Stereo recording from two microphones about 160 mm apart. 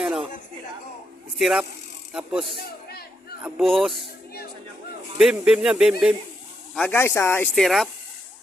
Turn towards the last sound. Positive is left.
turn(degrees=0)  # may be behind; listen again after turning